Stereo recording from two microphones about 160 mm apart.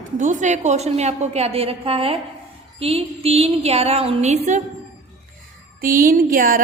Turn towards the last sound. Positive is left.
turn(degrees=-60)  # may be behind; listen again after turning